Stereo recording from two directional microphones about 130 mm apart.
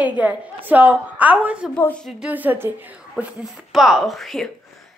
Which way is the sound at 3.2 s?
Centre (ahead or behind).